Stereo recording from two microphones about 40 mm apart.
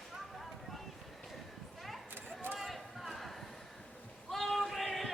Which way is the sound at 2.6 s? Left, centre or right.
Centre.